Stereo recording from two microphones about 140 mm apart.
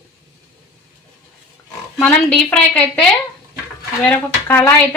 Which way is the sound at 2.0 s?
10° left (ahead or behind).